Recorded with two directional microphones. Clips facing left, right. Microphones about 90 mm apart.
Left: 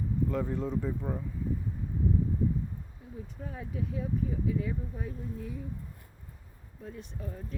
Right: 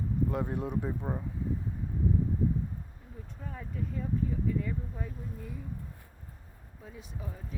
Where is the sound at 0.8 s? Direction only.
25° right (ahead or behind).